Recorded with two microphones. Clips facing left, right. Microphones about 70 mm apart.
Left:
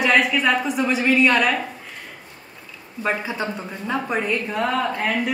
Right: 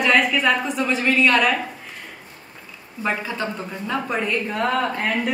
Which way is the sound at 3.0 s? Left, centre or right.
Centre.